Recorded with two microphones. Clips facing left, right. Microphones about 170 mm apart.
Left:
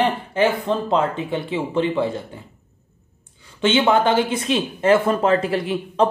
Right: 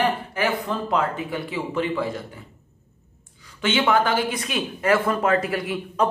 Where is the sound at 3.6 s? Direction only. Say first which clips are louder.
Left 4 dB; 25° left (ahead or behind).